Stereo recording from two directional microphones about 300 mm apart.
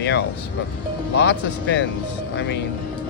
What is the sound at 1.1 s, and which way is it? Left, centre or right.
Speech, left.